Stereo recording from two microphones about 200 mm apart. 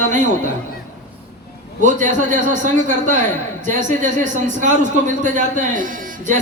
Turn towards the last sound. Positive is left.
turn(degrees=-40)  # may be behind; listen again after turning